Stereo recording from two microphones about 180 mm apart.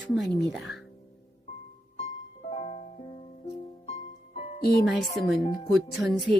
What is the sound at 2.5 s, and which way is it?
Music, 35° left (ahead or behind).